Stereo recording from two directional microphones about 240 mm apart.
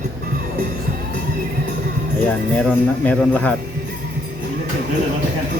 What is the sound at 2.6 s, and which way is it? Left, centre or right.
Speech, centre.